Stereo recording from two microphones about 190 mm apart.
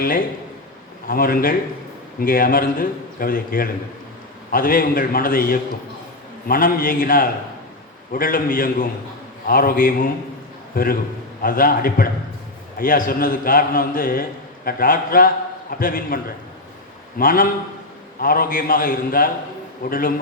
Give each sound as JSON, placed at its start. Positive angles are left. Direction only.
{"t": 1.0, "sound": "a man's voice", "side_deg": 50}